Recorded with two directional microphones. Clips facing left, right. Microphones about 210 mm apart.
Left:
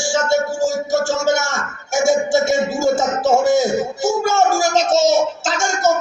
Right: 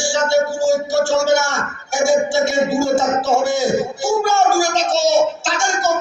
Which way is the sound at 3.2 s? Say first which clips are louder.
Left 3 dB; 50° left (ahead or behind).